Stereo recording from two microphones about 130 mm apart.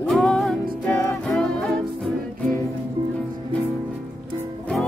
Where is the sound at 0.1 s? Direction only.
Centre (ahead or behind).